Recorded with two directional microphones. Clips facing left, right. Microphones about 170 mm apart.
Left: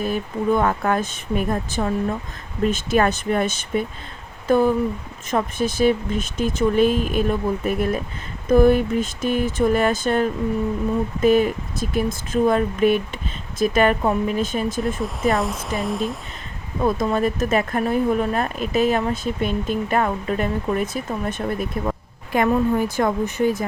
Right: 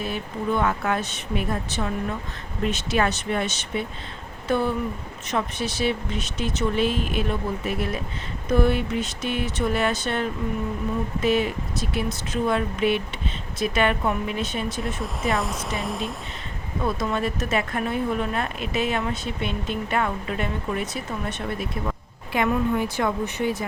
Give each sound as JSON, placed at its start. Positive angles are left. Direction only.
{"t": 0.0, "sound": "speech", "side_deg": 45}
{"t": 14.9, "sound": "speech", "side_deg": 0}
{"t": 16.8, "sound": "speech", "side_deg": 45}